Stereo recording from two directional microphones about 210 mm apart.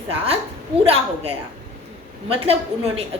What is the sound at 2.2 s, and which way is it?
Speech, 30° right (ahead or behind).